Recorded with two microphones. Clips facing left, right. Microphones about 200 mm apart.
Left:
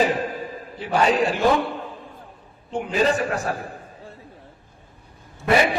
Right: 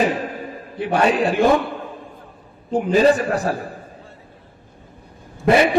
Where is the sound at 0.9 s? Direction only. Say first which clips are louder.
Right 2 dB; 60° right (ahead or behind).